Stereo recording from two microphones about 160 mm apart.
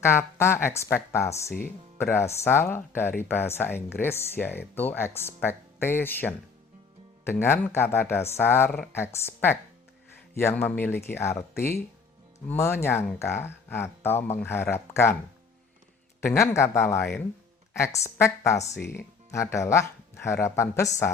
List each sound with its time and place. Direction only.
0.0 s speech: 15° left (ahead or behind)
16.2 s speech: 15° left (ahead or behind)